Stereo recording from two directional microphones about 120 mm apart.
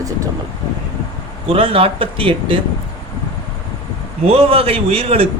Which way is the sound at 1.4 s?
50° right (ahead or behind).